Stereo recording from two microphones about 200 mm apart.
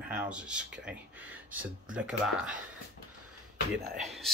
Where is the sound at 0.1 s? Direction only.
5° right (ahead or behind).